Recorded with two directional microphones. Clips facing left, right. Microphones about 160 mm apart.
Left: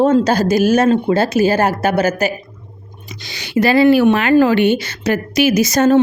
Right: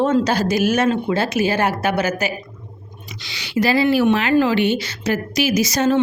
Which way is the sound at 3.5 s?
55° left (ahead or behind).